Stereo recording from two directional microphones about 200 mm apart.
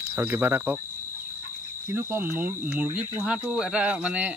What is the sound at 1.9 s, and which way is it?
Speech, 10° right (ahead or behind).